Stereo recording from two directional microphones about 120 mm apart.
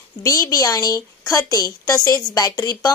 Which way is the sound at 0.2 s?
30° left (ahead or behind).